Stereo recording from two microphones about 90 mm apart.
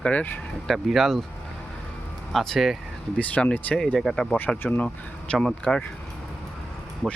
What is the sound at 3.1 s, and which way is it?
Speech, 15° left (ahead or behind).